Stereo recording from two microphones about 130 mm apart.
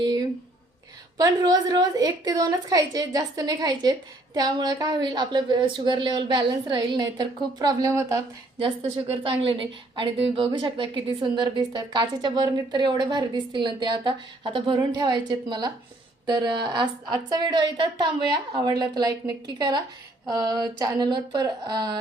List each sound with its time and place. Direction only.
1.2 s a woman's voice: 30° right (ahead or behind)
8.5 s a woman's voice: 45° right (ahead or behind)